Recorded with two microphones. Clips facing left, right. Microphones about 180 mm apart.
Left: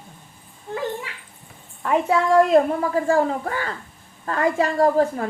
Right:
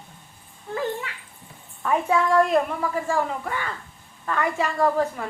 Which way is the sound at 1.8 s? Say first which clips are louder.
Left 2 dB; 25° left (ahead or behind).